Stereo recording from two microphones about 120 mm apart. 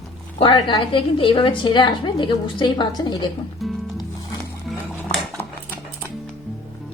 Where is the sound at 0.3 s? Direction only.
45° left (ahead or behind).